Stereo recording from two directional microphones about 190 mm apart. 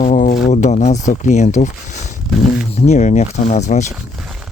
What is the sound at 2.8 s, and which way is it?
Speech, 35° left (ahead or behind).